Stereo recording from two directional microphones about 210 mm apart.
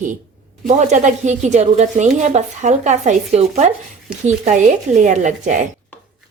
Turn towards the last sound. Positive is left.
turn(degrees=-35)  # may be behind; listen again after turning